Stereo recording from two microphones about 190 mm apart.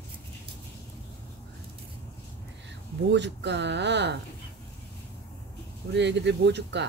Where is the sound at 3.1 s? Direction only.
65° right (ahead or behind).